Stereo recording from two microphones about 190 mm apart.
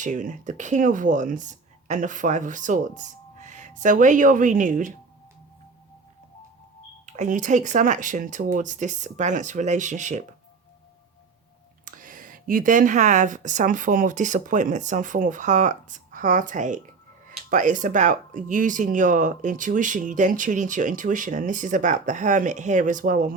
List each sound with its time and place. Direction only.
0.0 s speech: 40° right (ahead or behind)
7.0 s speech: 40° right (ahead or behind)
11.9 s speech: 45° right (ahead or behind)